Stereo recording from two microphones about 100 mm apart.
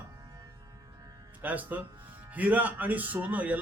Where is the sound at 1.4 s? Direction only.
15° right (ahead or behind).